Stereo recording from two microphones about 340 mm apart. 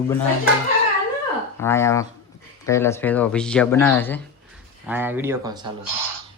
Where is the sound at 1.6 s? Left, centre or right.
Centre.